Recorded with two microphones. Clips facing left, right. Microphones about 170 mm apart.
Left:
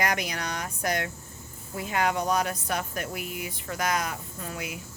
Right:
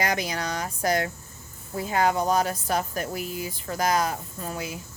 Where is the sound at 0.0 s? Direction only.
30° right (ahead or behind).